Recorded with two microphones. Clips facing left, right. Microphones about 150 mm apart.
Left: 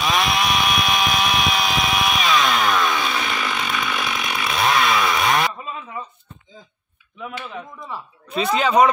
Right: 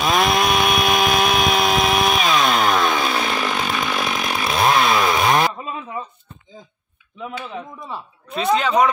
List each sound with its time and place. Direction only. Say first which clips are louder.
0.1 s chainsaw: right 4 dB; 40° right (ahead or behind); by 6.0 s 25° right (ahead or behind)
7.2 s speech: right 2 dB; 25° right (ahead or behind)
8.3 s speech: right 1 dB; centre (ahead or behind)